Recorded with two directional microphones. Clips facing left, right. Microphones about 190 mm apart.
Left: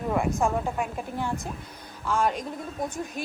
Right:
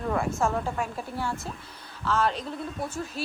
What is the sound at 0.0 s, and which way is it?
Speech, 15° left (ahead or behind).